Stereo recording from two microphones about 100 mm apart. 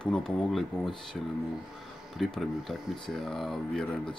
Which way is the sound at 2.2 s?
5° left (ahead or behind).